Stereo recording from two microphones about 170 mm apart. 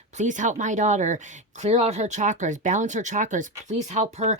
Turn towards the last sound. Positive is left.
turn(degrees=-40)  # may be behind; listen again after turning